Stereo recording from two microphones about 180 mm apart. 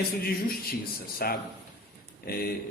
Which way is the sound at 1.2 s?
60° left (ahead or behind).